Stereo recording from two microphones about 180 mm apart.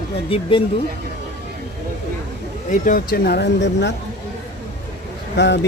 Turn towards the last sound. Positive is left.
turn(degrees=75)  # may be behind; listen again after turning